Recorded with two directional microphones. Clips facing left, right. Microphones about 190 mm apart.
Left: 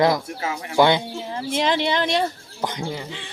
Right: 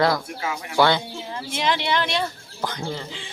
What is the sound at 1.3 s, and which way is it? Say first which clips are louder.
Speech: left 3 dB; 35° left (ahead or behind).